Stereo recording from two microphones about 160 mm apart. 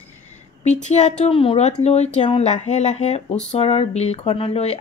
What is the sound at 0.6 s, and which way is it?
Speech, 45° left (ahead or behind).